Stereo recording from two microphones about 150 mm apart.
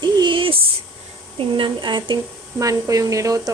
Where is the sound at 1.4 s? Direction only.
35° right (ahead or behind).